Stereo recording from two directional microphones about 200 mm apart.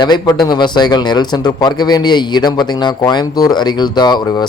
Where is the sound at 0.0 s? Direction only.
20° left (ahead or behind).